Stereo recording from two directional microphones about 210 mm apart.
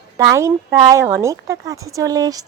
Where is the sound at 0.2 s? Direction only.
15° right (ahead or behind).